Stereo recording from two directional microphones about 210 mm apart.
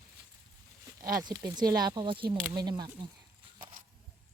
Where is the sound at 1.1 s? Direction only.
20° right (ahead or behind).